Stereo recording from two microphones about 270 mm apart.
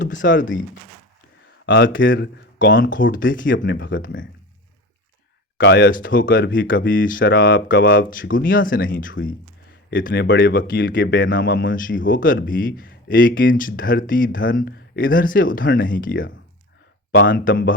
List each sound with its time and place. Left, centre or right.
0.0 s speech: left
1.6 s speech: left
5.5 s speech: left
11.6 s speech: left